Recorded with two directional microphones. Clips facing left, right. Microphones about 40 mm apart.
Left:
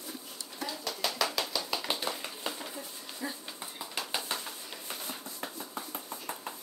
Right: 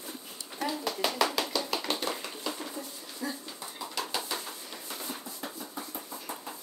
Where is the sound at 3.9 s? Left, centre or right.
Left.